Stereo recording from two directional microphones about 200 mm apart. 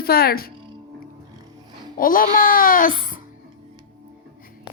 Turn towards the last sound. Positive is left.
turn(degrees=45)  # may be behind; listen again after turning